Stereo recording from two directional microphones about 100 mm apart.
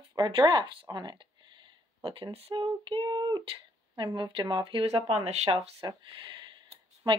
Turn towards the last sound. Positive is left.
turn(degrees=-45)  # may be behind; listen again after turning